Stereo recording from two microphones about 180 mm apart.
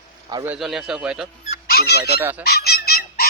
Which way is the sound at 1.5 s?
60° left (ahead or behind).